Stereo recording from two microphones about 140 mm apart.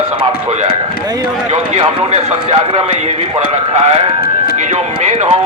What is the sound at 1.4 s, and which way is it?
Speech, 55° right (ahead or behind).